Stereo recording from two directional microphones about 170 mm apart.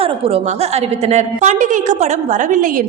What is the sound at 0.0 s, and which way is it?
A woman's voice, 35° right (ahead or behind).